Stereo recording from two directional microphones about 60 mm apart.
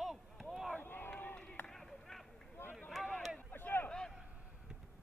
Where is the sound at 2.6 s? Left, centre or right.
Left.